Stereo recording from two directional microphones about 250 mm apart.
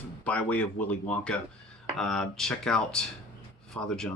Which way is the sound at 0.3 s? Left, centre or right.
Centre.